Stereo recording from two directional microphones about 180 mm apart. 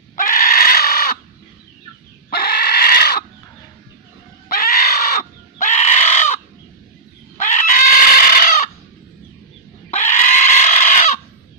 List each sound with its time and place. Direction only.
0.2 s livestock: 50° left (ahead or behind)
2.3 s pig: 60° left (ahead or behind)
4.4 s bird: 55° left (ahead or behind)
5.6 s crow: 40° left (ahead or behind)
7.4 s chicken: 45° left (ahead or behind)
9.9 s pig: 40° left (ahead or behind)